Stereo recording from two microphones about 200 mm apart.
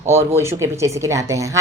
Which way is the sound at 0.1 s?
15° right (ahead or behind).